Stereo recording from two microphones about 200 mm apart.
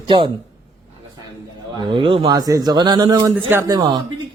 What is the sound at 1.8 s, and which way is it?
A man's voice, 25° right (ahead or behind).